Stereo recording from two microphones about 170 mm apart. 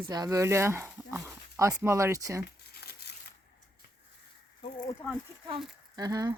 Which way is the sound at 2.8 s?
70° left (ahead or behind).